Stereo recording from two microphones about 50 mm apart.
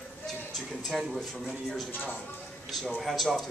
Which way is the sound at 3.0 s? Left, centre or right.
Centre.